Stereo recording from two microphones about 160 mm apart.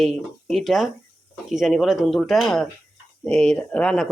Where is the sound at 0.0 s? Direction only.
Centre (ahead or behind).